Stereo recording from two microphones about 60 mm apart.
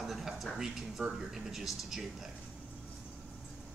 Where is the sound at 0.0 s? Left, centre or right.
Centre.